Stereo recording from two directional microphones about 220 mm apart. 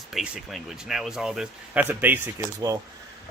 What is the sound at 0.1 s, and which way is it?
Speech, centre (ahead or behind).